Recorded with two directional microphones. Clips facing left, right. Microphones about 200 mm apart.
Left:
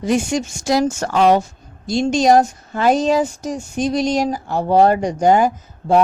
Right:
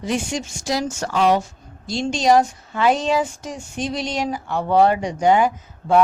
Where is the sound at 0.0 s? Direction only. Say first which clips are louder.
Left 6 dB; 45° left (ahead or behind).